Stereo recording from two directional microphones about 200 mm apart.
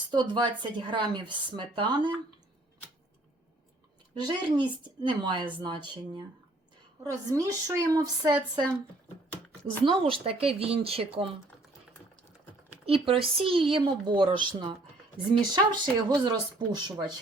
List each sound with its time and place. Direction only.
0.1 s speech: 25° right (ahead or behind)
4.2 s a woman's voice: 25° right (ahead or behind)
9.8 s speech: 25° right (ahead or behind)
12.8 s speech: 30° right (ahead or behind)